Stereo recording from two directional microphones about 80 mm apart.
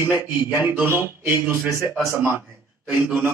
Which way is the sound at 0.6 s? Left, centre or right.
Right.